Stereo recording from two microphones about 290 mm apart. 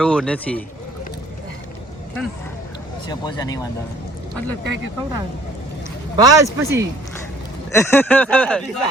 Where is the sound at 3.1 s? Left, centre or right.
Centre.